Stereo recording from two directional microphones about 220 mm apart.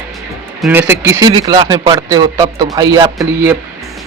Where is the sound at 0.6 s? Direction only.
10° right (ahead or behind).